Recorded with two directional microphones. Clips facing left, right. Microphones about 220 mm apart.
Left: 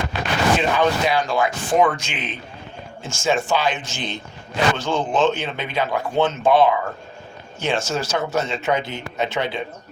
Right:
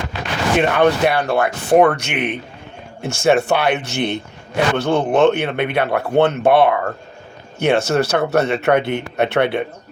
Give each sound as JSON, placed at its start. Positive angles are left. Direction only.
{"t": 0.6, "sound": "a man's voice", "side_deg": -60}